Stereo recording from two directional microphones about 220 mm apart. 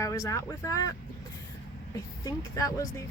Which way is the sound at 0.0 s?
15° left (ahead or behind).